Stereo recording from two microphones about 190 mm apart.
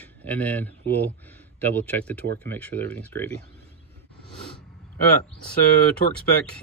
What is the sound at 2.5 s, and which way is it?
Speech, 10° left (ahead or behind).